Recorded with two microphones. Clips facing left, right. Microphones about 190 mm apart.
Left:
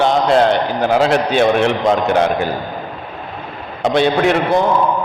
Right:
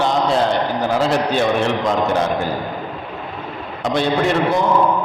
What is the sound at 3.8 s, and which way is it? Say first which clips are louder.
Speech: left 4 dB; 65° left (ahead or behind).